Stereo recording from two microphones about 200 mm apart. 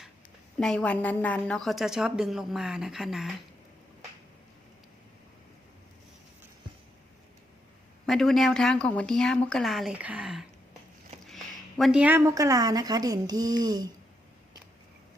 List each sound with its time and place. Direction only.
0.6 s a woman's voice: 5° left (ahead or behind)
8.0 s a woman's voice: centre (ahead or behind)
11.8 s a woman's voice: 5° right (ahead or behind)